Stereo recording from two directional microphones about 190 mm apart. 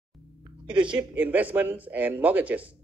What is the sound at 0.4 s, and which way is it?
Music, 25° right (ahead or behind).